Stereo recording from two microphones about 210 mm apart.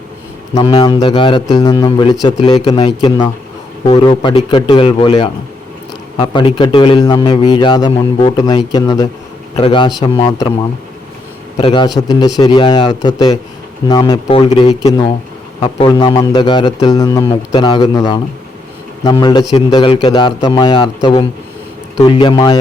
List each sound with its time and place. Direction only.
0.5 s a man's voice: 20° left (ahead or behind)
11.5 s a man's voice: 25° left (ahead or behind)
15.9 s a man's voice: 20° left (ahead or behind)